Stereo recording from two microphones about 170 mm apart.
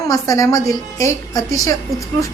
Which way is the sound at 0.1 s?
20° left (ahead or behind).